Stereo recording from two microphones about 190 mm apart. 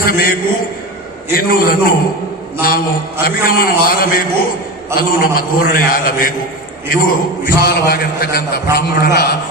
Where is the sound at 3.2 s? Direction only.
50° left (ahead or behind).